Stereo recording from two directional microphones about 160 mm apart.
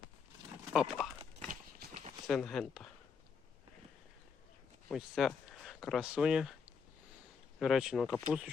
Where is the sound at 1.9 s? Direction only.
50° right (ahead or behind).